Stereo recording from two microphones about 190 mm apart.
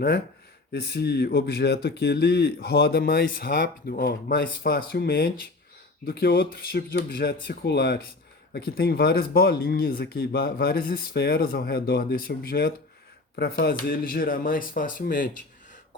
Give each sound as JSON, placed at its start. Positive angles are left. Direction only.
{"t": 0.7, "sound": "speech", "side_deg": 60}